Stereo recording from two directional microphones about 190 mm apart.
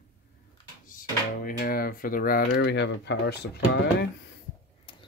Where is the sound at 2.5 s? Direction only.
75° left (ahead or behind).